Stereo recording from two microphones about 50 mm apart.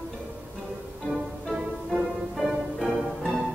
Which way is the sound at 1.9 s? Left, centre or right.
Centre.